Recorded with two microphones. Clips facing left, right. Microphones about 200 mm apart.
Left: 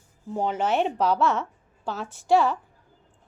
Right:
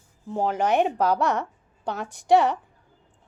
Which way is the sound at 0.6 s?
15° right (ahead or behind).